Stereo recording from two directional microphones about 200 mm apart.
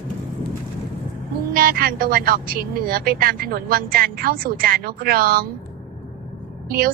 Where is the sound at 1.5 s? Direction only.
45° right (ahead or behind).